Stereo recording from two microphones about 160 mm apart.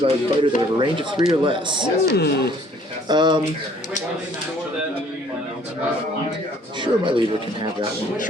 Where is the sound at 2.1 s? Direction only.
90° left.